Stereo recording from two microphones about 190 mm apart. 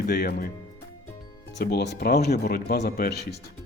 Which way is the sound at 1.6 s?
55° left (ahead or behind).